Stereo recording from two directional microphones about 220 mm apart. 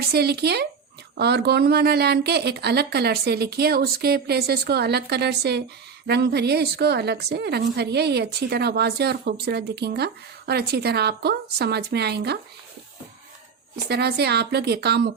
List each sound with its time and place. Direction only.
0.1 s a woman's voice: 45° right (ahead or behind)
13.8 s a woman's voice: 50° right (ahead or behind)